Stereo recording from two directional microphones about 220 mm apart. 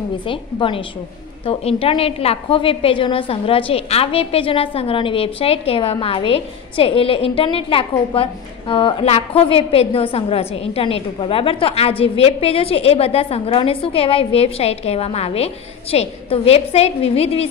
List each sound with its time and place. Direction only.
0.3 s a woman's voice: 25° left (ahead or behind)